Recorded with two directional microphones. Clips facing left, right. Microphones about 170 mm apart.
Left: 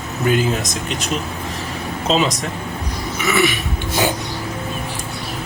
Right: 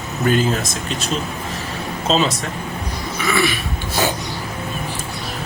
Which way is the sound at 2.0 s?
15° left (ahead or behind).